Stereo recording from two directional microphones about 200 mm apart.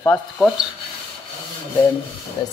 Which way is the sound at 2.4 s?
20° left (ahead or behind).